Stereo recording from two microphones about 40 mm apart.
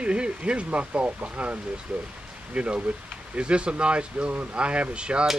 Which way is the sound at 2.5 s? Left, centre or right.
Right.